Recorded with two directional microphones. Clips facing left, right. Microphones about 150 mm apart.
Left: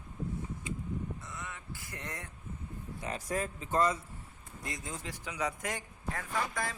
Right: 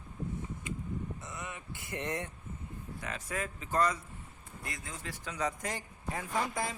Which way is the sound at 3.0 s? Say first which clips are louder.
Left 3 dB; 35° left (ahead or behind).